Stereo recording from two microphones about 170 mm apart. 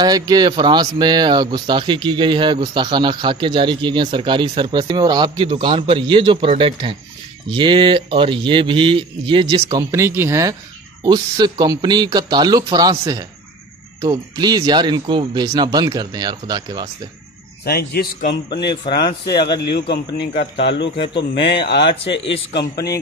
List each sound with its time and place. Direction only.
0.0 s speech: 25° right (ahead or behind)
17.6 s a man's voice: 65° left (ahead or behind)
18.7 s speech: 25° left (ahead or behind)
19.6 s a man's voice: 80° left